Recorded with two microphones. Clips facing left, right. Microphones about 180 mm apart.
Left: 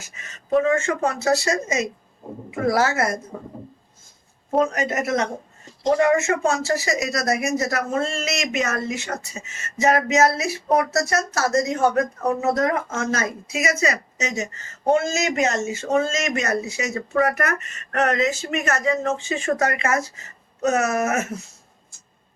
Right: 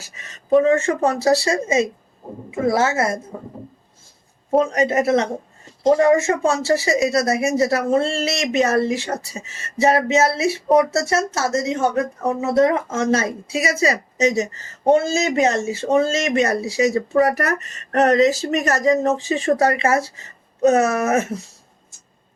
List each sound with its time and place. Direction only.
0.0 s speech: 35° right (ahead or behind)
4.6 s speech: 30° right (ahead or behind)